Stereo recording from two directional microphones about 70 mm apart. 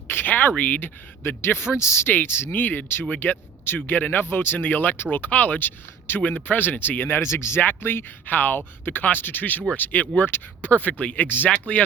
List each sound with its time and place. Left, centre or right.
0.1 s speech: left
7.2 s speech: left